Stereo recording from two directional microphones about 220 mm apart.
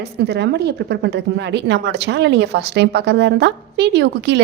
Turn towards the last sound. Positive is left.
turn(degrees=-50)  # may be behind; listen again after turning